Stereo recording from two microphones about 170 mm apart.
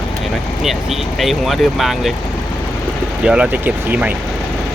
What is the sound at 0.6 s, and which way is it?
Speech, centre (ahead or behind).